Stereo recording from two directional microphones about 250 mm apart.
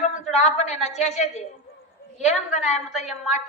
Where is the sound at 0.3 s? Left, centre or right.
Left.